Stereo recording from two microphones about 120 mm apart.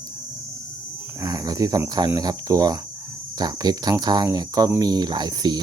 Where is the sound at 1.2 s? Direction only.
30° right (ahead or behind).